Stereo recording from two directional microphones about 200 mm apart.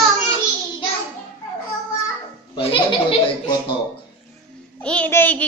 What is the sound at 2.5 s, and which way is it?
Speech, 25° left (ahead or behind).